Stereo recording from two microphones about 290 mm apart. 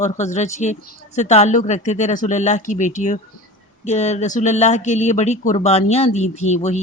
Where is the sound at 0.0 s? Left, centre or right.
Left.